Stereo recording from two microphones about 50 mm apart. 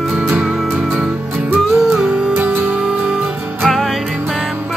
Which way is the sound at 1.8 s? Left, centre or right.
Centre.